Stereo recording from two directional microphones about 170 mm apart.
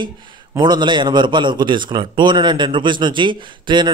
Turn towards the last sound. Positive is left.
turn(degrees=-25)  # may be behind; listen again after turning